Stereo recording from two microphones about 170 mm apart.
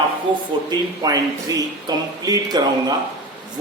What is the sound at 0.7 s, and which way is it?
A man's voice, 25° right (ahead or behind).